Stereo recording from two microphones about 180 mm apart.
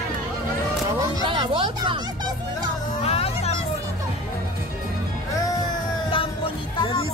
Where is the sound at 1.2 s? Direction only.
25° right (ahead or behind).